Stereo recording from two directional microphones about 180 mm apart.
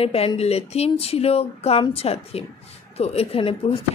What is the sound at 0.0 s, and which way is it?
Speech, 35° left (ahead or behind).